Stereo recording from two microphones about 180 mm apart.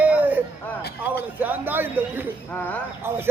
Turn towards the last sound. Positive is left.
turn(degrees=-10)  # may be behind; listen again after turning